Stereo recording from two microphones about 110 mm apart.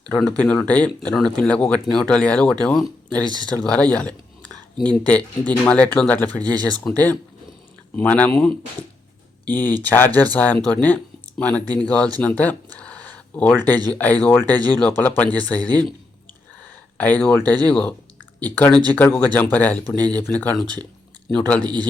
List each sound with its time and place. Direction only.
0.2 s speech: 10° left (ahead or behind)
7.9 s speech: 15° left (ahead or behind)
9.5 s speech: 20° left (ahead or behind)
10.8 s a sound: 15° left (ahead or behind)
11.7 s speech: 10° left (ahead or behind)
17.0 s speech: 15° left (ahead or behind)
21.6 s a man's voice: 40° right (ahead or behind)